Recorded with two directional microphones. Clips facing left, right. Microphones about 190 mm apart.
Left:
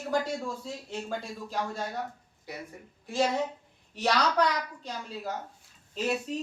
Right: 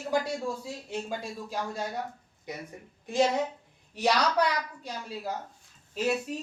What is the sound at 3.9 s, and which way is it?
Speech, 10° right (ahead or behind).